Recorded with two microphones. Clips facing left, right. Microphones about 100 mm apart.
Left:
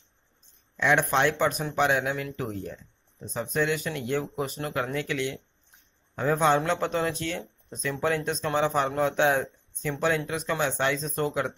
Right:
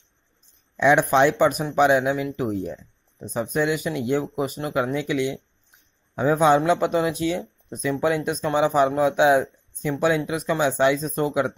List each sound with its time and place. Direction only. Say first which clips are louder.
0.7 s speech: right 6 dB; 15° right (ahead or behind)